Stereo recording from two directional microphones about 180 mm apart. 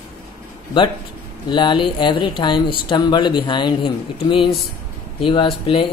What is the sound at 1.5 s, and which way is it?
Speech, 25° left (ahead or behind).